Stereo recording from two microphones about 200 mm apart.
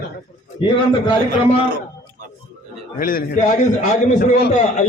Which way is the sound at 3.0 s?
45° left (ahead or behind).